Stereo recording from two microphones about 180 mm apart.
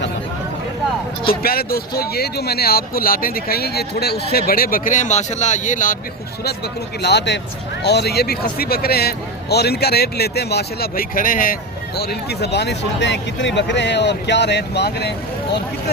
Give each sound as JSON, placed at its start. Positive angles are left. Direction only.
{"t": 1.3, "sound": "speech", "side_deg": 55}
{"t": 7.0, "sound": "speech", "side_deg": 70}
{"t": 11.9, "sound": "speech", "side_deg": 65}